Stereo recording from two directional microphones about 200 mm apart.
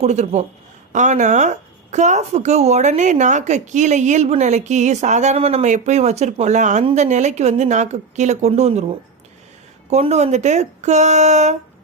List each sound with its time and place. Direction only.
0.0 s speech: 35° right (ahead or behind)